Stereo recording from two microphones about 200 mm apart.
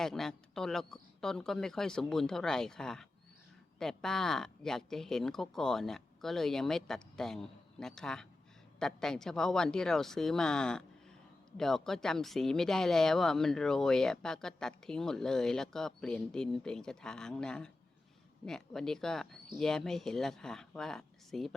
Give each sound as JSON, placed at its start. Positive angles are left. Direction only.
{"t": 0.0, "sound": "speech", "side_deg": 0}